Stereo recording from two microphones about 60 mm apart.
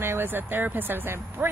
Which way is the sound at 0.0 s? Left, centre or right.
Right.